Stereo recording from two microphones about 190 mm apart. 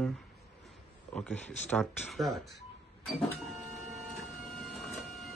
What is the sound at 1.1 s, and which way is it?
Speech, 10° left (ahead or behind).